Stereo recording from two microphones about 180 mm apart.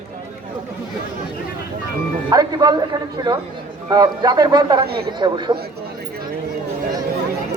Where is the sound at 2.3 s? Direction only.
20° right (ahead or behind).